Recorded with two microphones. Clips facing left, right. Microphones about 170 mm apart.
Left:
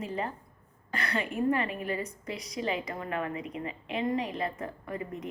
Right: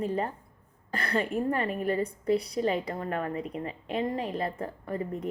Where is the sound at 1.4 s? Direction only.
40° right (ahead or behind).